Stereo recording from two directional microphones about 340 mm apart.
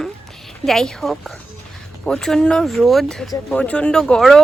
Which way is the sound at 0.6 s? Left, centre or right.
Centre.